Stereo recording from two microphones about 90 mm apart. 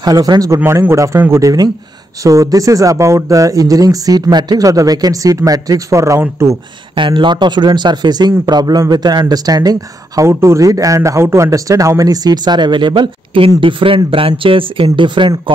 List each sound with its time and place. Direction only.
0.0 s speech: 45° right (ahead or behind)
0.7 s speech: 30° right (ahead or behind)
7.0 s speech: 65° right (ahead or behind); by 10.2 s 45° right (ahead or behind)
10.2 s speech: 35° right (ahead or behind); by 15.5 s 65° right (ahead or behind)